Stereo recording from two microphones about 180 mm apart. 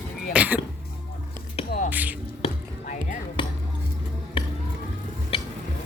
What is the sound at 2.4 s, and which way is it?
Music, 30° left (ahead or behind).